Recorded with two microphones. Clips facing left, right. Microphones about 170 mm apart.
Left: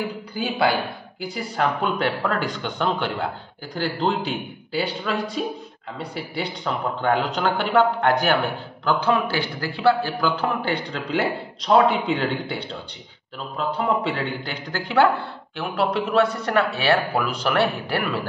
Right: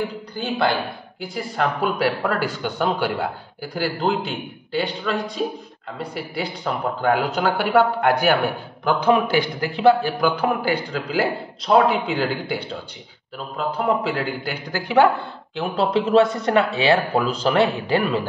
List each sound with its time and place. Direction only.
0.3 s a man's voice: 10° left (ahead or behind); by 18.0 s 20° right (ahead or behind)